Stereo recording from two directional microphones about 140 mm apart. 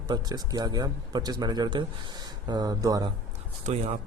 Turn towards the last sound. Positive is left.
turn(degrees=-50)  # may be behind; listen again after turning